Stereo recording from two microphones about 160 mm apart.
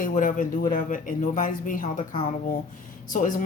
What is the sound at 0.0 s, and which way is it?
Speech, 55° left (ahead or behind).